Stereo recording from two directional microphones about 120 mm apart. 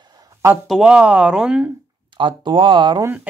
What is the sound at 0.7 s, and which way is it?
Speech, 5° right (ahead or behind).